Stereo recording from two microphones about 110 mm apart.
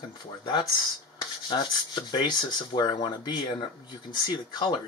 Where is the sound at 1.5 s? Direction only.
45° left (ahead or behind).